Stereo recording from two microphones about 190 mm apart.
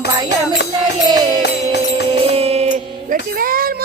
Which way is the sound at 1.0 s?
20° right (ahead or behind).